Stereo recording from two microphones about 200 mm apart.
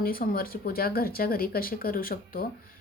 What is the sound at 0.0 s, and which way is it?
Speech, 45° left (ahead or behind).